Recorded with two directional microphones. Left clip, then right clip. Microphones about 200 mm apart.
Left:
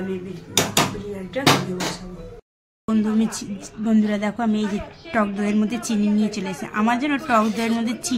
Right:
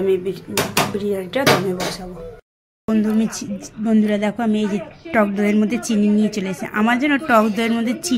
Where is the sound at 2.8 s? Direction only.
15° right (ahead or behind).